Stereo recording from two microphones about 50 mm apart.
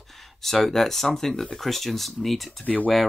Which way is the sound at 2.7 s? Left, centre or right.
Left.